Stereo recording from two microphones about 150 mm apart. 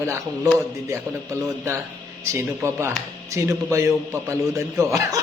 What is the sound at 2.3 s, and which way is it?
A man's voice, 15° right (ahead or behind).